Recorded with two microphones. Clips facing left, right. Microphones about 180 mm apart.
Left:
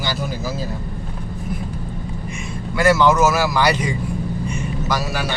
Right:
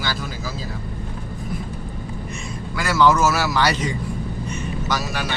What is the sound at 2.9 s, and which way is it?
Speech, 20° left (ahead or behind).